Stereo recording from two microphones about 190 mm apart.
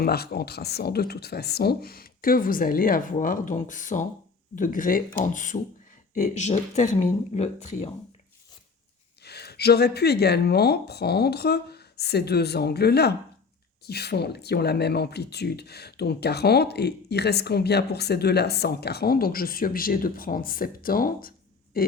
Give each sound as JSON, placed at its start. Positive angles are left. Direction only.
{"t": 0.0, "sound": "speech", "side_deg": 55}
{"t": 9.2, "sound": "speech", "side_deg": 60}